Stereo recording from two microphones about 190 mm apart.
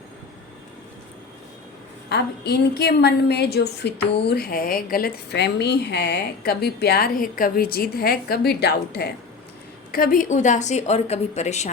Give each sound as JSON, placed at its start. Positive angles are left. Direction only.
{"t": 2.0, "sound": "a woman's voice", "side_deg": 60}